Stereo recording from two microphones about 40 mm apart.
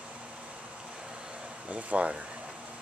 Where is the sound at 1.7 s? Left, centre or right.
Right.